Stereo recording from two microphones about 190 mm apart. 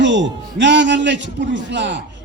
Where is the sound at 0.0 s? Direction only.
70° right (ahead or behind).